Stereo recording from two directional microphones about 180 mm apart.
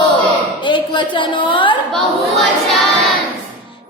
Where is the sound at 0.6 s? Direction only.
25° left (ahead or behind).